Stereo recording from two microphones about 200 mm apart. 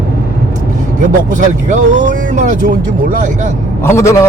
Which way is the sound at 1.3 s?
40° right (ahead or behind).